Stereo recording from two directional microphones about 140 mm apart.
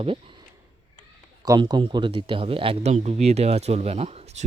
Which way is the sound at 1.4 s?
30° right (ahead or behind).